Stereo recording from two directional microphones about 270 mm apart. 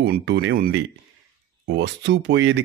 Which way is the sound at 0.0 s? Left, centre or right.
Right.